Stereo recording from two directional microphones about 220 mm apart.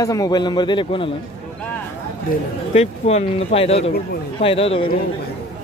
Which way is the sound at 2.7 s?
30° left (ahead or behind).